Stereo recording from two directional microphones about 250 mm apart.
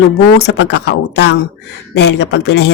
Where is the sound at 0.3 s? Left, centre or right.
Left.